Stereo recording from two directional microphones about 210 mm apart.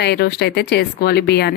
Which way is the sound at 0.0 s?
50° left (ahead or behind).